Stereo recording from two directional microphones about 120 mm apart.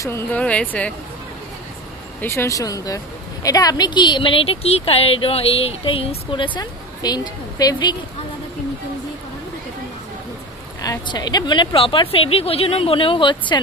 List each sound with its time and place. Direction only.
0.3 s speech: 10° left (ahead or behind)
2.2 s a woman's voice: 25° left (ahead or behind)
10.8 s a woman's voice: 35° left (ahead or behind)